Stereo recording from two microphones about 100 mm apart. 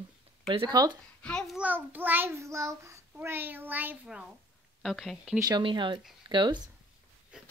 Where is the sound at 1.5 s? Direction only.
15° right (ahead or behind).